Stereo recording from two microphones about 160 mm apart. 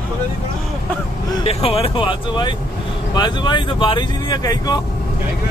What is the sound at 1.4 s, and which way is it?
Speech, 35° left (ahead or behind).